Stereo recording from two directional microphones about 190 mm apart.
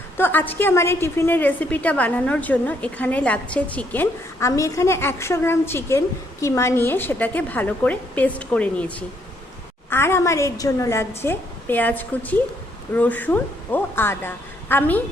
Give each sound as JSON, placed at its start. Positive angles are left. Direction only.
{"t": 0.2, "sound": "a woman's voice", "side_deg": 10}